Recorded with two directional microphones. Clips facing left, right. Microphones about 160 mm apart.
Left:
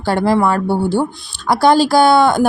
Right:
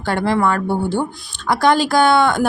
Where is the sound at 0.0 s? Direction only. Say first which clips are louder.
Left 3 dB; 35° left (ahead or behind).